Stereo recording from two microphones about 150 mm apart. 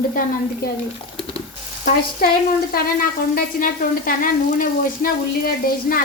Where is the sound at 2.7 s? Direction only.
90° left.